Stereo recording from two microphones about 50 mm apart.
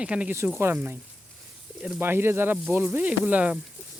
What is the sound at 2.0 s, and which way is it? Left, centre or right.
Speech, right.